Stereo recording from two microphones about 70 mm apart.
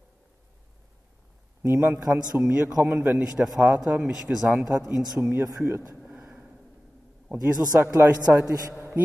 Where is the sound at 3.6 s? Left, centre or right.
Centre.